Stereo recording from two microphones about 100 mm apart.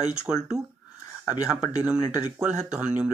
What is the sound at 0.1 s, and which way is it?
Speech, 10° right (ahead or behind).